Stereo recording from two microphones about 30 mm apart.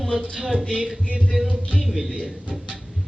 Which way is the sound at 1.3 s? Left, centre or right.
Centre.